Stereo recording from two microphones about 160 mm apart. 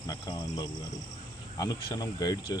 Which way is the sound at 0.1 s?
30° left (ahead or behind).